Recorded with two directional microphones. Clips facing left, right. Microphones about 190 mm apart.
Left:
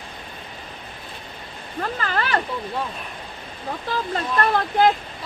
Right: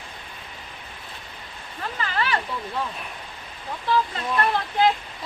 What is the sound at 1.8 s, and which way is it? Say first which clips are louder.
Speech: left 3 dB; 45° left (ahead or behind).